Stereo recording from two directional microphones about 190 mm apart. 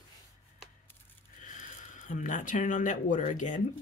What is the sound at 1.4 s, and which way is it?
Speech, 40° left (ahead or behind).